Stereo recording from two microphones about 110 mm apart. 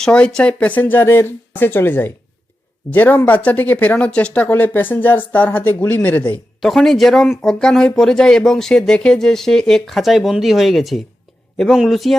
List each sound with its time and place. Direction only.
0.0 s speech: 5° left (ahead or behind)
6.6 s speech: centre (ahead or behind)